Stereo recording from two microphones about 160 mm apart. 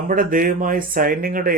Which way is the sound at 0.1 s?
60° right (ahead or behind).